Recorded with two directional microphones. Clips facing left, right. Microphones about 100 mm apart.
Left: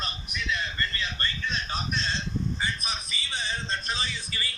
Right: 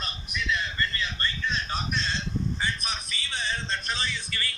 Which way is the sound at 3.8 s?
15° left (ahead or behind).